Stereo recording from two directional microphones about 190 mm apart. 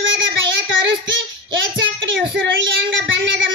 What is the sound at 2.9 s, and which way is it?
Child singing, 80° right.